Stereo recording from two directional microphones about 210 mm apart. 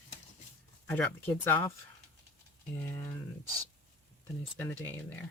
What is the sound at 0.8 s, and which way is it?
Speech, 10° left (ahead or behind).